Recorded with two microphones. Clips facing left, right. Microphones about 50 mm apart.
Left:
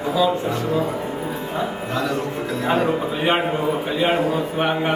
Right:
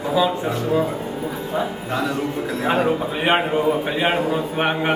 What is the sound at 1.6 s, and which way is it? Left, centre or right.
A man's voice, centre.